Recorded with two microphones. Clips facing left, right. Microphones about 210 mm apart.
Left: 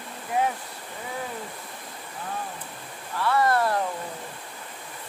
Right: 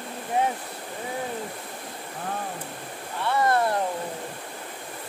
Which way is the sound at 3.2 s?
25° right (ahead or behind).